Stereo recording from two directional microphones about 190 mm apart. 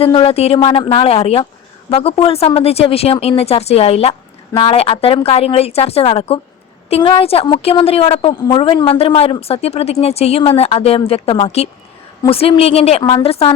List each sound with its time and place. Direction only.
0.0 s a woman's voice: 30° left (ahead or behind)